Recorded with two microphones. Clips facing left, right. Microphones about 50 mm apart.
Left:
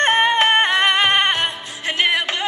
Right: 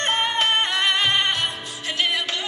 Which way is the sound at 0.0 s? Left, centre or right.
Left.